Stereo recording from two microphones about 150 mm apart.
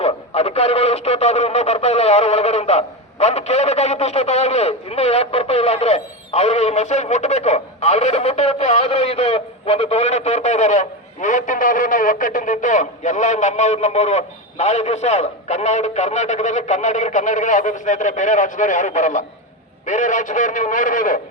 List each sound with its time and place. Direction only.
0.0 s a man's voice: 45° left (ahead or behind); by 21.2 s 60° left (ahead or behind)